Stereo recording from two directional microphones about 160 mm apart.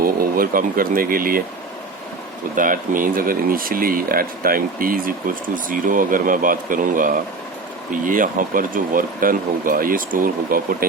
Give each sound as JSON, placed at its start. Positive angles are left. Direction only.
{"t": 0.0, "sound": "speech", "side_deg": -60}
{"t": 2.6, "sound": "speech", "side_deg": -60}